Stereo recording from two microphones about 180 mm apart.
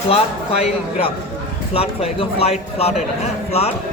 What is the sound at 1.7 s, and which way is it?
Speech, 35° left (ahead or behind).